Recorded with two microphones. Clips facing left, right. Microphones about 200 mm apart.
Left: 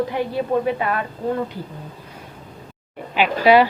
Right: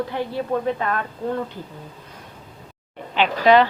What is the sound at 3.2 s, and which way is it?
Speech, 10° left (ahead or behind).